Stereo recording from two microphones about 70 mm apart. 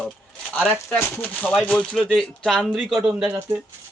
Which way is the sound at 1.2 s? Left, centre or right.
Left.